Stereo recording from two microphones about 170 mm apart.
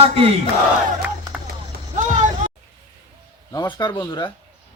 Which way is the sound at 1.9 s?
45° right (ahead or behind).